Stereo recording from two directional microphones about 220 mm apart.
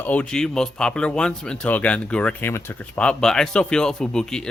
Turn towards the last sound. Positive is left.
turn(degrees=5)  # may be behind; listen again after turning